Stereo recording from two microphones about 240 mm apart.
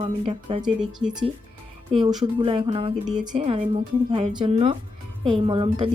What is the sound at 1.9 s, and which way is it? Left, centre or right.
Speech, right.